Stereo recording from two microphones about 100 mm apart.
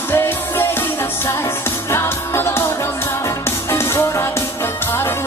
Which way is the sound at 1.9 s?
25° left (ahead or behind).